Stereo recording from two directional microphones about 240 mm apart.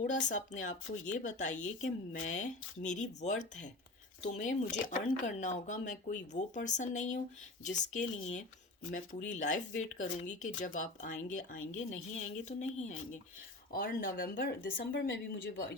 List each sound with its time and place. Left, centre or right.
0.0 s speech: left